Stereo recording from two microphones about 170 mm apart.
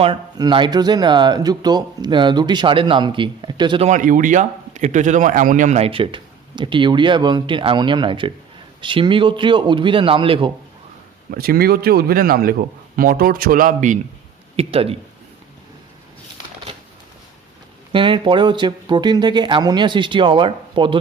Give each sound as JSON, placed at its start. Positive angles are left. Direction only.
{"t": 0.0, "sound": "speech", "side_deg": -25}
{"t": 3.8, "sound": "a man's voice", "side_deg": -50}
{"t": 11.3, "sound": "speech", "side_deg": -60}
{"t": 14.5, "sound": "speech", "side_deg": -35}
{"t": 17.9, "sound": "speech", "side_deg": -30}